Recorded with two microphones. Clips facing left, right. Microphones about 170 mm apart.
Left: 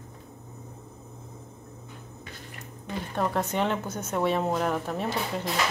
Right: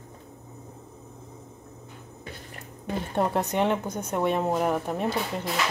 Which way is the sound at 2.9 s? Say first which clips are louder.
Right 3 dB; 20° right (ahead or behind).